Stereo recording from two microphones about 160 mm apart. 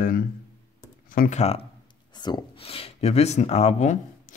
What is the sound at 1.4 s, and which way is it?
Speech, 40° left (ahead or behind).